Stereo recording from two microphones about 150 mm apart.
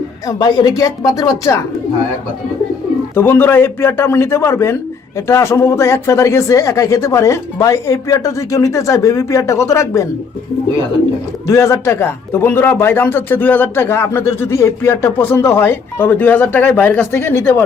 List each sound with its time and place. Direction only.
0.3 s a man's voice: 25° left (ahead or behind)
3.2 s a man's voice: 15° left (ahead or behind)
11.4 s a man's voice: 20° left (ahead or behind)